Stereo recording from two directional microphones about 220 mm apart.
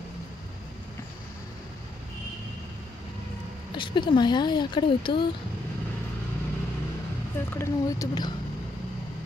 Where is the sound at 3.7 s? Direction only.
20° left (ahead or behind).